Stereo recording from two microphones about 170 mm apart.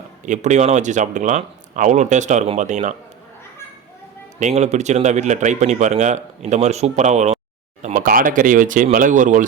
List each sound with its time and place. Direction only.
0.3 s speech: 45° right (ahead or behind)
4.4 s speech: 45° right (ahead or behind)